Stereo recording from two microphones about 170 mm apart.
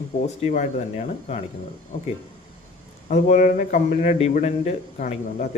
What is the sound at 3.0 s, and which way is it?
Speech, 50° left (ahead or behind).